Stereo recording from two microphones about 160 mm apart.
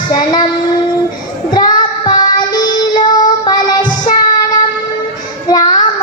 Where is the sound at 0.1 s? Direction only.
25° left (ahead or behind).